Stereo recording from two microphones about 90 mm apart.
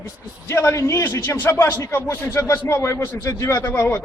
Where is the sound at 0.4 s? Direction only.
30° left (ahead or behind).